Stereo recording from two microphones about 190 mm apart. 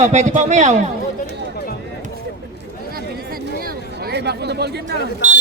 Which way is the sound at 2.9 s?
50° right (ahead or behind).